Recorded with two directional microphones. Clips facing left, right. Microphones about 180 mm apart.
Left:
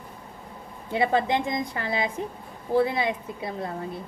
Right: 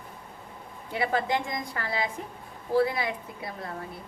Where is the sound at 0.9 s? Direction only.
25° left (ahead or behind).